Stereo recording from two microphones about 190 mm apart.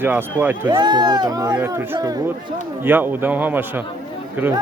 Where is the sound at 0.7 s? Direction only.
25° right (ahead or behind).